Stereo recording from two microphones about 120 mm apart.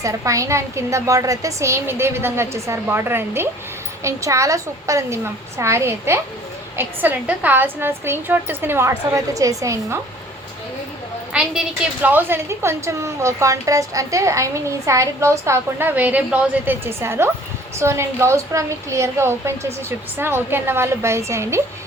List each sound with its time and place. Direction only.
0.0 s a woman's voice: 25° right (ahead or behind)
11.3 s a woman's voice: 10° right (ahead or behind)